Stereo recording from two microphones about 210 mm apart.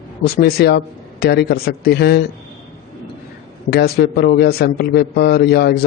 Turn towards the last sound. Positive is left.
turn(degrees=50)  # may be behind; listen again after turning